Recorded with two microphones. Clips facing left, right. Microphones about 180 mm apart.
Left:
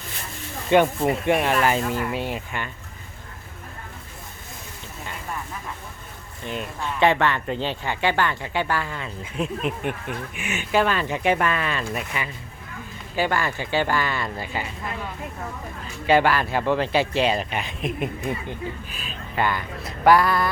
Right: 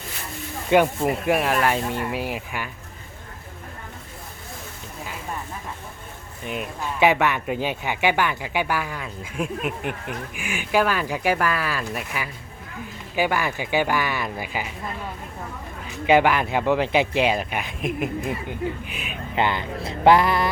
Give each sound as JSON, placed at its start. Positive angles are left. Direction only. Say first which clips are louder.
{"t": 0.7, "sound": "speech", "louder": "even", "side_deg": -5}
{"t": 6.4, "sound": "speech", "louder": "even", "side_deg": -5}
{"t": 16.0, "sound": "speech", "louder": "right 1 dB", "side_deg": -15}
{"t": 18.9, "sound": "speech", "louder": "even", "side_deg": -20}